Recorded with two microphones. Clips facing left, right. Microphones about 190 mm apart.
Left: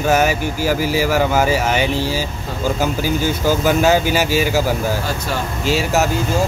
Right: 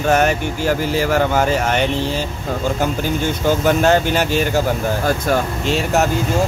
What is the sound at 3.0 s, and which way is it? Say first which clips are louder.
Speech: left 1 dB; 5° left (ahead or behind).